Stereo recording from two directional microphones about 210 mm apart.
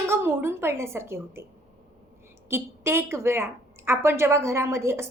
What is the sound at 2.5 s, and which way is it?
A woman's voice, 10° right (ahead or behind).